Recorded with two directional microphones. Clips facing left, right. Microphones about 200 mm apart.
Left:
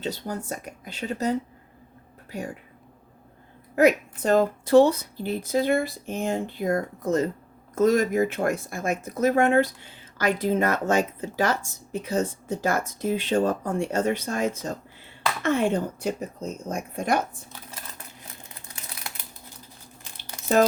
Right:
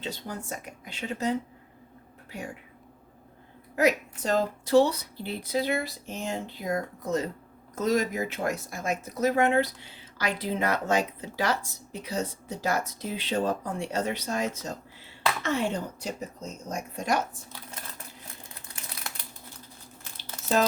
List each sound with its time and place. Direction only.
0.0 s speech: 40° left (ahead or behind)
3.8 s speech: 55° left (ahead or behind)